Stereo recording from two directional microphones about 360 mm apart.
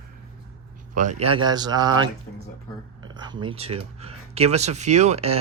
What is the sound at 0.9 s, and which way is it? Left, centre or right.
Speech, centre.